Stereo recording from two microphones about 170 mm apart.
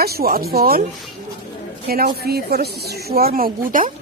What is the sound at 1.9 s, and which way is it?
A woman's voice, 65° right (ahead or behind).